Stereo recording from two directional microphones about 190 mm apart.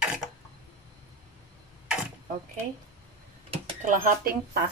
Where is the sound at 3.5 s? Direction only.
40° right (ahead or behind).